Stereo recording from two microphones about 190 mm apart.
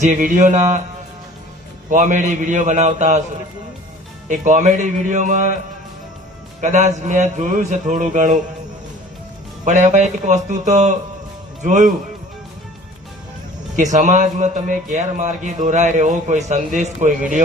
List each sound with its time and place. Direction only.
0.0 s a man's voice: 40° right (ahead or behind)
1.9 s a man's voice: 40° right (ahead or behind)
4.3 s a man's voice: 40° right (ahead or behind)
6.6 s a man's voice: 40° right (ahead or behind)
9.6 s a man's voice: 40° right (ahead or behind)
13.7 s a man's voice: 40° right (ahead or behind)